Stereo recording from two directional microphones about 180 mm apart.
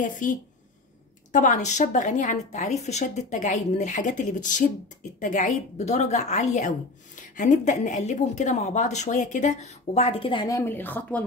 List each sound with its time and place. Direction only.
0.0 s a woman's voice: 45° left (ahead or behind); by 11.2 s 10° left (ahead or behind)